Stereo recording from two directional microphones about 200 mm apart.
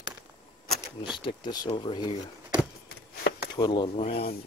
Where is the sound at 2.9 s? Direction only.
50° left (ahead or behind).